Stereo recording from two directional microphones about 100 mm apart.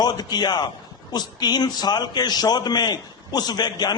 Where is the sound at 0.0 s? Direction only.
45° left (ahead or behind).